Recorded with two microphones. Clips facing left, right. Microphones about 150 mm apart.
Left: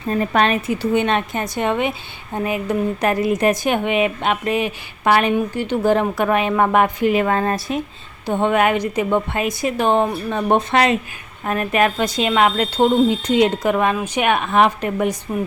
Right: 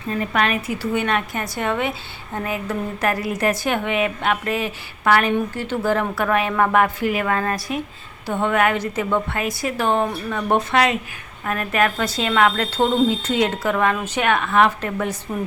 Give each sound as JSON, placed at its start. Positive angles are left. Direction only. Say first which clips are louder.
{"t": 0.1, "sound": "speech", "louder": "left 4 dB", "side_deg": 35}